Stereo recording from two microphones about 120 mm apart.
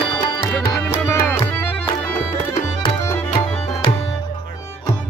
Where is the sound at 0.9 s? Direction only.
20° left (ahead or behind).